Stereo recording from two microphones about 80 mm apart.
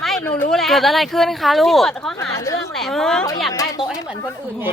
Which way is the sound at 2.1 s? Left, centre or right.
Left.